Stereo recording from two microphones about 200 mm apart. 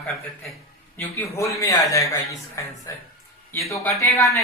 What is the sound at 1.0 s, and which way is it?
Speech, 15° left (ahead or behind).